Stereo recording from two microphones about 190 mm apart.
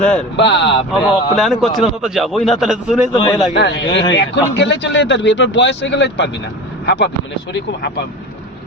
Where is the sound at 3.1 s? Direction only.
20° left (ahead or behind).